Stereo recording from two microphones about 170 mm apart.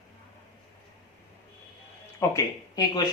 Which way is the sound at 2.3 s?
20° left (ahead or behind).